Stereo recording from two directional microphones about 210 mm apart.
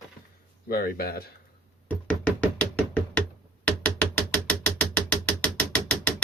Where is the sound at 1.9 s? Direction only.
5° left (ahead or behind).